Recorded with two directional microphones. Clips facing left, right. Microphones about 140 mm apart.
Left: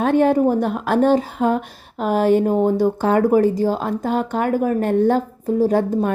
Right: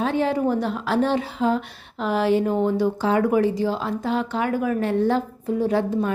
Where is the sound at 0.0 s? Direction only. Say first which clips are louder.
Left 6 dB; 55° left (ahead or behind).